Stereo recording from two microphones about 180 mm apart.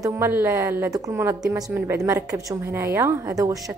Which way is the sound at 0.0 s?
15° right (ahead or behind).